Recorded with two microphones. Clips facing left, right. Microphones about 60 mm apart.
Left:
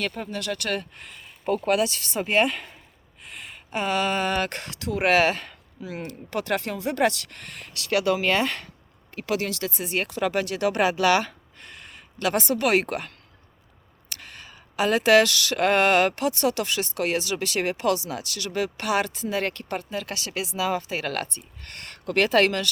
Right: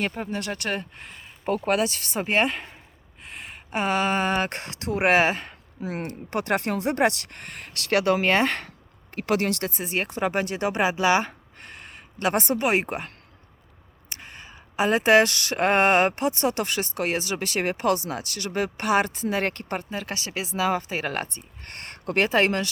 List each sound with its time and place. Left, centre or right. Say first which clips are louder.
0.0 s speech: right 1 dB; right
1.5 s speech: left 1 dB; right
2.2 s speech: left 1 dB; right
9.7 s speech: even; right
12.6 s speech: left 1 dB; right
14.1 s speech: even; right